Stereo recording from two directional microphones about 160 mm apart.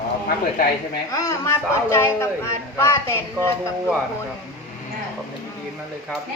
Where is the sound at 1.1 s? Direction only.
20° left (ahead or behind).